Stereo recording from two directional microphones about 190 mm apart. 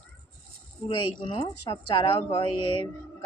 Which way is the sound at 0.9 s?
25° left (ahead or behind).